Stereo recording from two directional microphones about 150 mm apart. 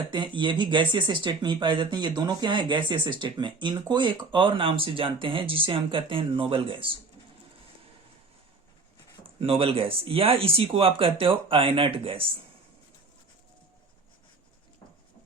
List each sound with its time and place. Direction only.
0.3 s speech: 30° right (ahead or behind)
9.4 s speech: 40° right (ahead or behind)